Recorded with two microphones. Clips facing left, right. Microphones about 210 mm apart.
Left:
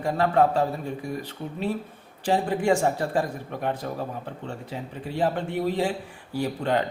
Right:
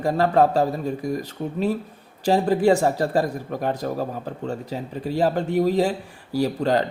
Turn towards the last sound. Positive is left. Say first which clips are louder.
# right 4 dB
turn(degrees=-35)  # may be behind; listen again after turning